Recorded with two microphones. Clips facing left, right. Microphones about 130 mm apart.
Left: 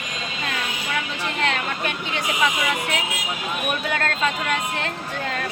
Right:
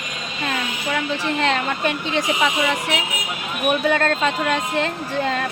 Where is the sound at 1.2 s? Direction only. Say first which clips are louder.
Right 3 dB; 30° right (ahead or behind).